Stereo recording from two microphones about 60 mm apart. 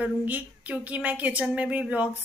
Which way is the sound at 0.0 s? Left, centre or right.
Right.